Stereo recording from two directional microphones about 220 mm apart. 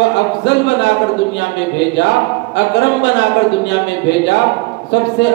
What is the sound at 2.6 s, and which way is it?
Speech, 50° left (ahead or behind).